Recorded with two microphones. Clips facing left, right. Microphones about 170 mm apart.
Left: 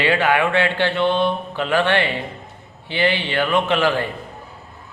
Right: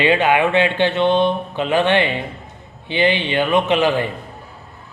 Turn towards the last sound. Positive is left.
turn(degrees=-20)  # may be behind; listen again after turning